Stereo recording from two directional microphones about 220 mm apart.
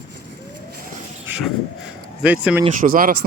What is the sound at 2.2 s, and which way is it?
Speech, 5° right (ahead or behind).